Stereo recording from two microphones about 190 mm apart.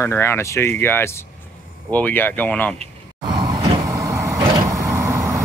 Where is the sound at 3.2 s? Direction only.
20° right (ahead or behind).